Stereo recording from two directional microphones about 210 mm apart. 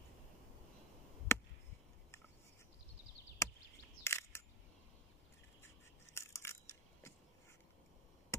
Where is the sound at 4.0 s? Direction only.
10° left (ahead or behind).